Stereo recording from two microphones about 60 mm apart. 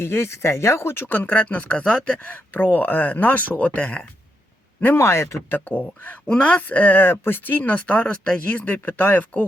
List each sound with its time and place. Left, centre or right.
0.0 s speech: left; by 2.1 s centre
2.1 s speech: left
4.9 s speech: left
5.5 s speech: left